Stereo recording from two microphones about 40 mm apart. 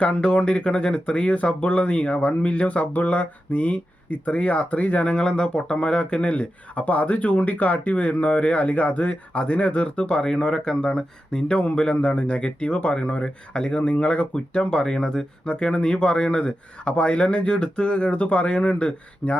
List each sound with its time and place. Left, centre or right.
0.0 s speech: left
15.4 s speech: left